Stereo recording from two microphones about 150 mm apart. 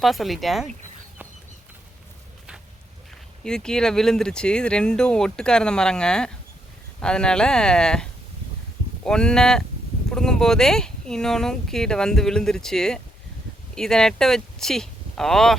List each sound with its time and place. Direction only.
0.0 s speech: centre (ahead or behind)
3.4 s speech: 5° left (ahead or behind)
9.0 s speech: 5° left (ahead or behind)